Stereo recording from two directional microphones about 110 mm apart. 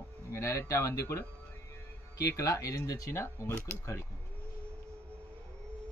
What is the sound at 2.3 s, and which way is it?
Speech, 30° left (ahead or behind).